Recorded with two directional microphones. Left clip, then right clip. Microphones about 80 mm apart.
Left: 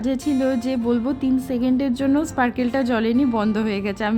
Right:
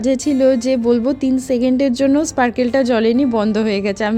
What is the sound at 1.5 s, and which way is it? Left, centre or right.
A woman's voice, right.